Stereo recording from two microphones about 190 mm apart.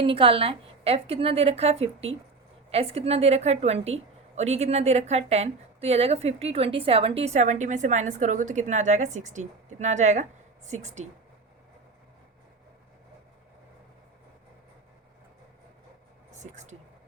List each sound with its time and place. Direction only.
0.0 s a woman's voice: 30° right (ahead or behind)
16.3 s speech: 40° right (ahead or behind)